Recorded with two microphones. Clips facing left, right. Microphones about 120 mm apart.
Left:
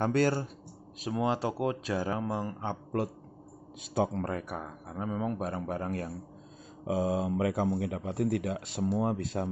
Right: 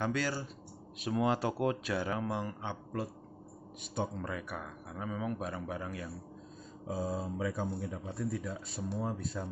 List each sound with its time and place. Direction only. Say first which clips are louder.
0.0 s speech: left 7 dB; 50° left (ahead or behind)
1.0 s speech: left 1 dB; 25° left (ahead or behind); by 3.0 s 45° left (ahead or behind)
4.2 s speech: left 5 dB; 45° left (ahead or behind)
6.8 s speech: left 7 dB; 90° left